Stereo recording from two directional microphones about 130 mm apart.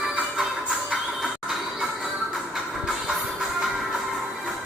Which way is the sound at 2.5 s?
Centre (ahead or behind).